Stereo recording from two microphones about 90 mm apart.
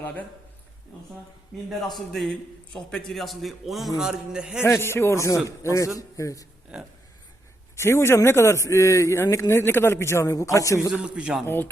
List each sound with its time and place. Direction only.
0.0 s speech: 15° left (ahead or behind)
1.9 s a man's voice: centre (ahead or behind)
4.6 s a man's voice: 25° left (ahead or behind)
6.7 s speech: 10° right (ahead or behind)
7.8 s a man's voice: 30° left (ahead or behind)
10.9 s speech: 10° right (ahead or behind)
11.4 s speech: 25° left (ahead or behind)